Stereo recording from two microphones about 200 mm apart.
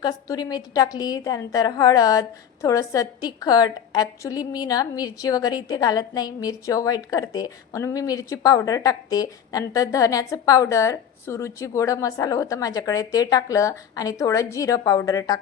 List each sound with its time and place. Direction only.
0.0 s a woman's voice: 20° left (ahead or behind)